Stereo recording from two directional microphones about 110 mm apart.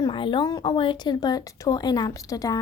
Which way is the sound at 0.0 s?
50° left (ahead or behind).